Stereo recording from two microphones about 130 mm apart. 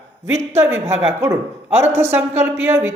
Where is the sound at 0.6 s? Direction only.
20° right (ahead or behind).